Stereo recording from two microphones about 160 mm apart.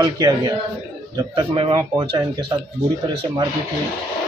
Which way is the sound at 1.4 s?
35° right (ahead or behind).